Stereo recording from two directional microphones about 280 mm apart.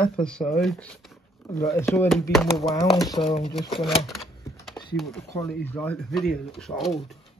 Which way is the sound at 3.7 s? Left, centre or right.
Centre.